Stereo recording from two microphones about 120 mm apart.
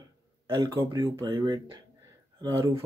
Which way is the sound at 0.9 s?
35° right (ahead or behind).